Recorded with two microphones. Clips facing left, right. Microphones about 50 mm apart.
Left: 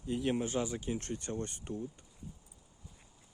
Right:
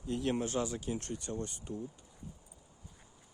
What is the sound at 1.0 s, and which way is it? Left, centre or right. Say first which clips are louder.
Speech: left 1 dB; left.